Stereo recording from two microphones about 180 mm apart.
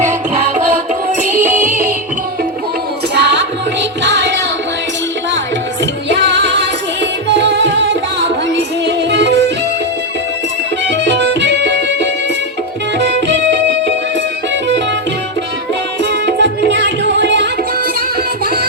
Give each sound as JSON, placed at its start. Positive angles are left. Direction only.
{"t": 3.2, "sound": "music", "side_deg": -70}
{"t": 5.8, "sound": "music", "side_deg": -80}
{"t": 11.0, "sound": "music", "side_deg": -75}
{"t": 13.2, "sound": "music", "side_deg": -80}
{"t": 16.0, "sound": "music", "side_deg": -75}